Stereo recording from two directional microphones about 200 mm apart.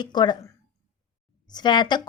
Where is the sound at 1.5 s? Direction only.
20° left (ahead or behind).